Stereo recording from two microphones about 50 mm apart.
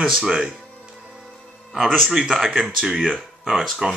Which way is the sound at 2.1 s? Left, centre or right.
Centre.